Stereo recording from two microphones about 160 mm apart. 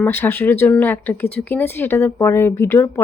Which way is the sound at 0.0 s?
15° left (ahead or behind).